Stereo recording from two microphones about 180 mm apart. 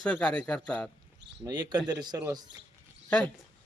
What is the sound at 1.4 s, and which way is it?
Speech, 20° right (ahead or behind).